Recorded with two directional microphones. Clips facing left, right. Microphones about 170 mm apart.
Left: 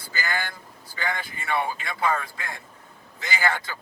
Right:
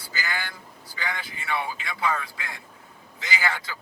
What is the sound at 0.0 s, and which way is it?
Vehicle, 50° left (ahead or behind).